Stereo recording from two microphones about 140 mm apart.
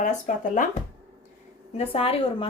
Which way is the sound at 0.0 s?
65° left (ahead or behind).